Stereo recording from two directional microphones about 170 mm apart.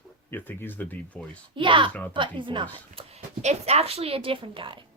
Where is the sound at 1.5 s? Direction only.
30° right (ahead or behind).